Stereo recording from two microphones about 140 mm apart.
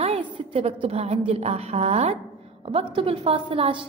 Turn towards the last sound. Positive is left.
turn(degrees=-40)  # may be behind; listen again after turning